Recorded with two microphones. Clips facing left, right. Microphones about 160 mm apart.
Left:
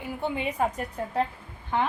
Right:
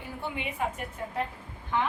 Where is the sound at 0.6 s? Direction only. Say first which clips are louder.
Left 5 dB; 40° left (ahead or behind).